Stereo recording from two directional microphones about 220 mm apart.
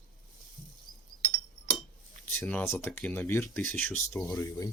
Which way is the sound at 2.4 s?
5° left (ahead or behind).